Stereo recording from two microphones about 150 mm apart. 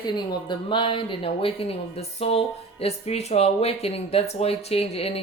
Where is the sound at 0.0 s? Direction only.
30° left (ahead or behind).